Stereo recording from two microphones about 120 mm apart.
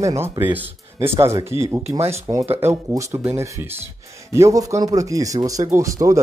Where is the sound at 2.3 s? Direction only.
35° right (ahead or behind).